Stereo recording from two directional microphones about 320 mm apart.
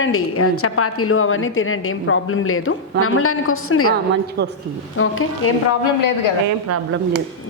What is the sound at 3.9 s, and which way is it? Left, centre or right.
Speech, right.